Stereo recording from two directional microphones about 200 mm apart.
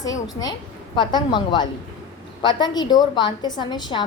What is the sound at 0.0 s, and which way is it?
A woman's voice, 20° left (ahead or behind).